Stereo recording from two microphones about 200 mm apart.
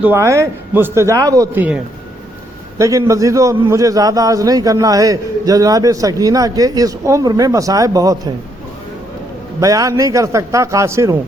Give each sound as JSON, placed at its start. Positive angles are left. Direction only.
{"t": 0.0, "sound": "a man's voice", "side_deg": -15}
{"t": 9.6, "sound": "a man's voice", "side_deg": -15}